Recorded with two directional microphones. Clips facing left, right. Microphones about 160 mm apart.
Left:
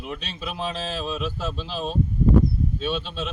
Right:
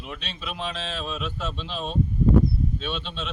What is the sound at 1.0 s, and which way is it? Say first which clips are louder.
Speech: left 3 dB; 5° left (ahead or behind).